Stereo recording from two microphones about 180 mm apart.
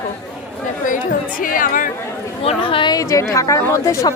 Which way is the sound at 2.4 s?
30° left (ahead or behind).